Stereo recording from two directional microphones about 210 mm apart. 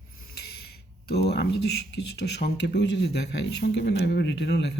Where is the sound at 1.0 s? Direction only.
50° left (ahead or behind).